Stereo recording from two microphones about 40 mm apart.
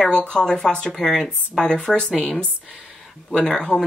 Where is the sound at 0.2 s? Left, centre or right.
Left.